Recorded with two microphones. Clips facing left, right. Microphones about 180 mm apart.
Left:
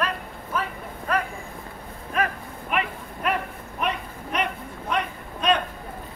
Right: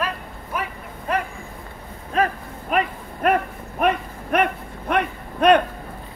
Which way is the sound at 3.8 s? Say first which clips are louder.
Right 7 dB; 55° right (ahead or behind).